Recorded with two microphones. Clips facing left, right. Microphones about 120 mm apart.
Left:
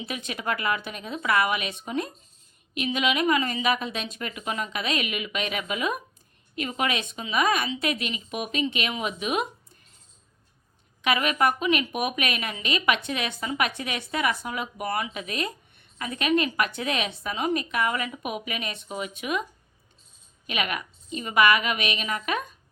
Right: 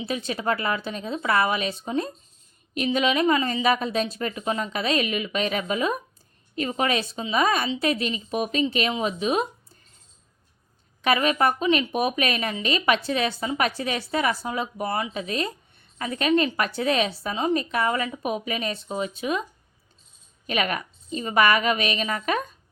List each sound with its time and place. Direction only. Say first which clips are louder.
0.0 s speech: right 5 dB; 30° right (ahead or behind)
11.0 s speech: right 2 dB; 35° right (ahead or behind)
20.5 s speech: right 4 dB; 35° right (ahead or behind)